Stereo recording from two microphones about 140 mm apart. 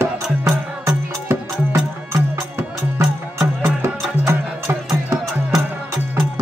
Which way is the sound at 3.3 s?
5° right (ahead or behind).